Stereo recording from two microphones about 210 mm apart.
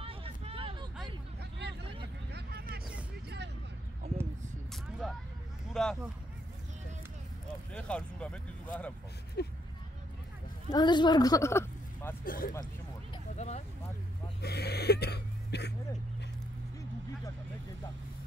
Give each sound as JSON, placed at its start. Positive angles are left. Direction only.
{"t": 0.0, "sound": "vehicle", "side_deg": -25}
{"t": 1.6, "sound": "vehicle", "side_deg": -50}
{"t": 5.0, "sound": "vehicle", "side_deg": 0}
{"t": 5.7, "sound": "a sound", "side_deg": 5}
{"t": 7.7, "sound": "speech", "side_deg": 5}
{"t": 9.4, "sound": "speech", "side_deg": 50}
{"t": 10.7, "sound": "speech", "side_deg": 20}
{"t": 12.3, "sound": "speech", "side_deg": 40}
{"t": 13.4, "sound": "vehicle", "side_deg": 35}
{"t": 14.4, "sound": "a sound", "side_deg": 50}